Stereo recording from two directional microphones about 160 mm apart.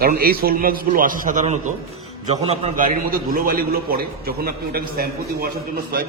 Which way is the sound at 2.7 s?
60° right (ahead or behind).